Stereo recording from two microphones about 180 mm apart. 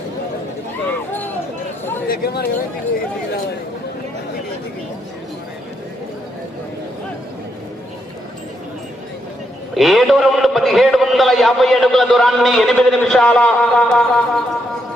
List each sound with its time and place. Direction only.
2.0 s speech: 60° left (ahead or behind)
9.7 s a man's voice: centre (ahead or behind)